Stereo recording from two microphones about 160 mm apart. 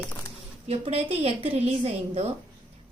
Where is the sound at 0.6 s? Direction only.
40° right (ahead or behind).